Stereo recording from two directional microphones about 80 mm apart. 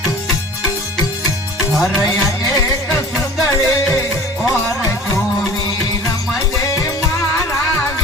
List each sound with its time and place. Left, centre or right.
3.5 s music: left
6.6 s music: left